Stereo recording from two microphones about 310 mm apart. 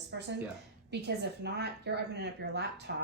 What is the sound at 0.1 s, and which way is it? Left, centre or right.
A woman's voice, right.